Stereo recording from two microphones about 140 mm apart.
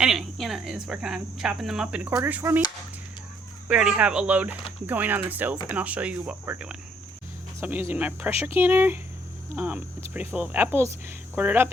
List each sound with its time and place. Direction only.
0.0 s speech: centre (ahead or behind)
2.0 s speech: 15° right (ahead or behind)
3.7 s speech: 5° right (ahead or behind)